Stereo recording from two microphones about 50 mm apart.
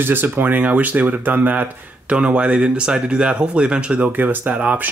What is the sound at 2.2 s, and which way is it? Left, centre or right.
Speech, right.